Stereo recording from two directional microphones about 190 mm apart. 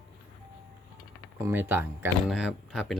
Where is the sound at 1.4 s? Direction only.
10° right (ahead or behind).